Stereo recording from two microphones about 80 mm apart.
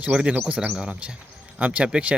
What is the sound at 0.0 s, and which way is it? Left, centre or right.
Speech, centre.